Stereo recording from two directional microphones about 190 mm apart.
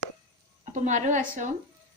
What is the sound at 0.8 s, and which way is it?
Speech, 40° right (ahead or behind).